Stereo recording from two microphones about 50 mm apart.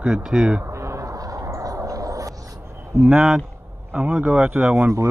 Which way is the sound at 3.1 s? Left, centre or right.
Centre.